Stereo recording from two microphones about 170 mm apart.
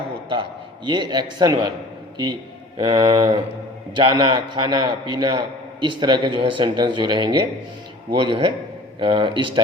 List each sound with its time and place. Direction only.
0.9 s a man's voice: 25° right (ahead or behind)